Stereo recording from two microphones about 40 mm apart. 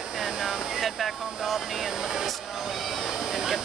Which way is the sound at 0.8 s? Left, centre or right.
Centre.